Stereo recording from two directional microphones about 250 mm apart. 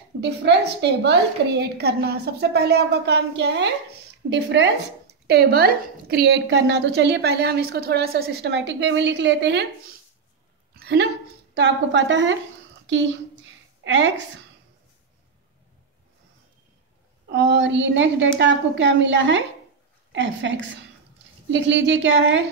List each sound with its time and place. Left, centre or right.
0.2 s a woman's voice: right
10.7 s a sound: right
11.5 s a woman's voice: right
13.8 s a woman's voice: right
17.3 s a woman's voice: right